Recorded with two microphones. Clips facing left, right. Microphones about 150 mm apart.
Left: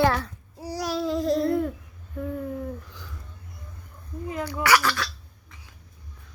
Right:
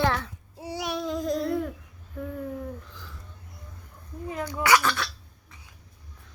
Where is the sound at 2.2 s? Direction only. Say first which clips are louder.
Left 3 dB; 5° left (ahead or behind).